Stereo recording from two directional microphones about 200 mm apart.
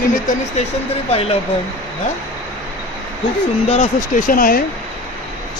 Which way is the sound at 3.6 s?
35° left (ahead or behind).